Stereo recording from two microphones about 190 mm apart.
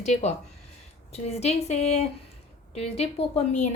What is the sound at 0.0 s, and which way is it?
Speech, 35° left (ahead or behind).